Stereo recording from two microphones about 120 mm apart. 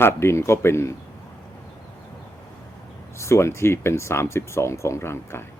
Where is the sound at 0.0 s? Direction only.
20° left (ahead or behind).